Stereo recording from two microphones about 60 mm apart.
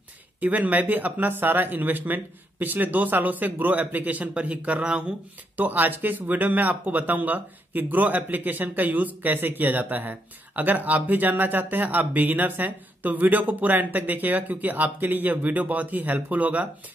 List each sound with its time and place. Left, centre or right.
0.4 s speech: right
5.6 s speech: right